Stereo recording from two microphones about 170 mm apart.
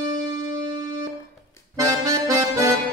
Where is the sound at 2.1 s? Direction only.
20° right (ahead or behind).